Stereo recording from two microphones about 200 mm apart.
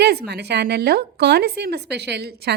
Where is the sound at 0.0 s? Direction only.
55° right (ahead or behind).